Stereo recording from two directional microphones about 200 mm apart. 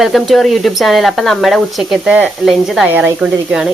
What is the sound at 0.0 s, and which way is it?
Speech, centre (ahead or behind).